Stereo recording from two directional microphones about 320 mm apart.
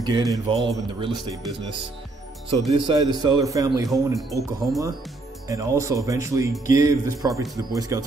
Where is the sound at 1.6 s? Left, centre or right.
Centre.